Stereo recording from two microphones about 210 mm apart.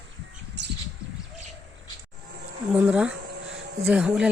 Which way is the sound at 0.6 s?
55° right (ahead or behind).